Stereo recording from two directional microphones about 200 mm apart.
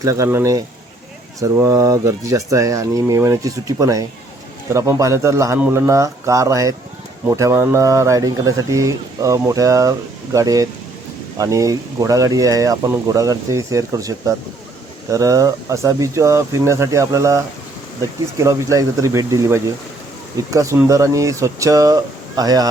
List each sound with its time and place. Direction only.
0.0 s speech: 15° right (ahead or behind)